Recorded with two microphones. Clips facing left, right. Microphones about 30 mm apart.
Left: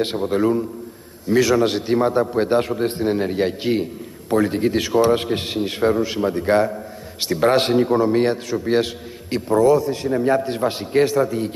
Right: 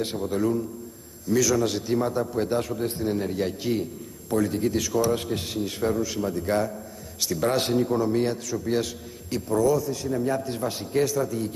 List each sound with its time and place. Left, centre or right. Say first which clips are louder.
0.0 s a man's voice: left 6 dB; left